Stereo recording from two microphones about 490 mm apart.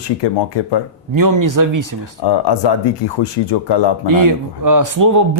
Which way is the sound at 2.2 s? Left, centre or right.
Left.